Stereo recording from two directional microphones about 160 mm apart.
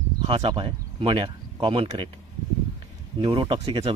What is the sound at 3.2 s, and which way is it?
Speech, 35° right (ahead or behind).